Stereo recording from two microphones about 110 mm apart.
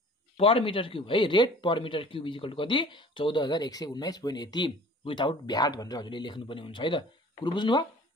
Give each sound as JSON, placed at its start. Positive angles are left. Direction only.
{"t": 0.4, "sound": "speech", "side_deg": 55}